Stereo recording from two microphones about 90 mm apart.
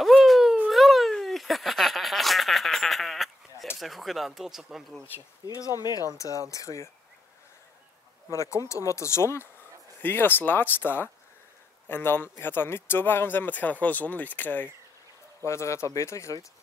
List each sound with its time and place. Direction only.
0.0 s a sound: centre (ahead or behind)
3.8 s speech: centre (ahead or behind)
5.5 s speech: 40° left (ahead or behind)
8.3 s speech: 35° left (ahead or behind)
15.4 s speech: 30° left (ahead or behind)